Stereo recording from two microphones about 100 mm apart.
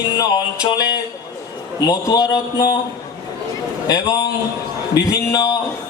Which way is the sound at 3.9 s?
40° left (ahead or behind).